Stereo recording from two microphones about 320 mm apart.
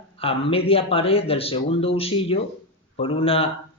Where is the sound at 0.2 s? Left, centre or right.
Centre.